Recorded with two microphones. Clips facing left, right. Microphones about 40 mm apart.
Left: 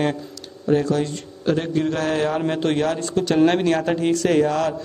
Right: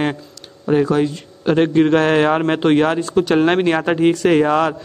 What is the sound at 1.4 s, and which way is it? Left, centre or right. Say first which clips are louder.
A man's voice: right 7 dB; right.